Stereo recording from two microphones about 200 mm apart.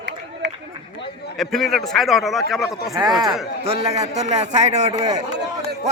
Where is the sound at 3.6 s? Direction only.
30° right (ahead or behind).